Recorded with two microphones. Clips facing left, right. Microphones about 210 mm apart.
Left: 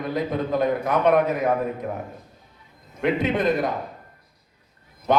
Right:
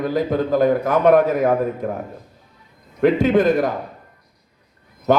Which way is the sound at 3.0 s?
50° right (ahead or behind).